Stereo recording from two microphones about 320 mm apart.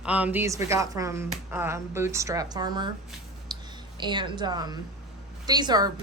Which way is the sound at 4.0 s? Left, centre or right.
Centre.